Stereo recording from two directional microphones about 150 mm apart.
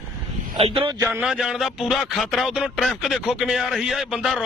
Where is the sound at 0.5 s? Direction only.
40° right (ahead or behind).